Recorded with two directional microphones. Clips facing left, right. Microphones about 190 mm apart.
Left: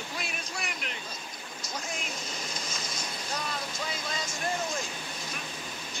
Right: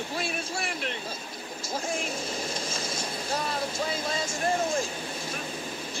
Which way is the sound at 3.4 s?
30° right (ahead or behind).